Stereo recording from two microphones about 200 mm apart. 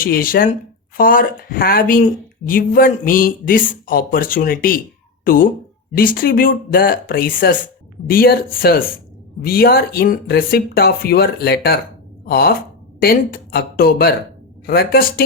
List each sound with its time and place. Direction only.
0.0 s speech: 45° left (ahead or behind)